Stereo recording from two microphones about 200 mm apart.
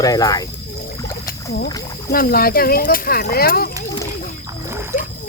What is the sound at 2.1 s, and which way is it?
Speech, 45° left (ahead or behind).